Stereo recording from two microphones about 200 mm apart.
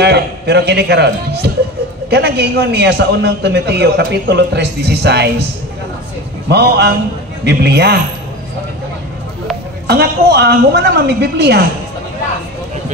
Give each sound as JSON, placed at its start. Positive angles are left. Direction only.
{"t": 0.0, "sound": "a man's voice", "side_deg": -55}
{"t": 6.5, "sound": "a man's voice", "side_deg": -55}
{"t": 9.8, "sound": "a woman's voice", "side_deg": -55}